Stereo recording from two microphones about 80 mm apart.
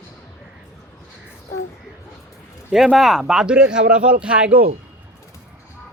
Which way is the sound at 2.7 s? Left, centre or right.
Centre.